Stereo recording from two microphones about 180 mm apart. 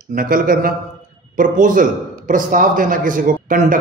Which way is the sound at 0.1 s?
50° right (ahead or behind).